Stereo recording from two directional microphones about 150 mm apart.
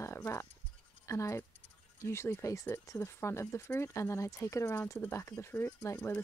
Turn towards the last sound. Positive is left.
turn(degrees=15)  # may be behind; listen again after turning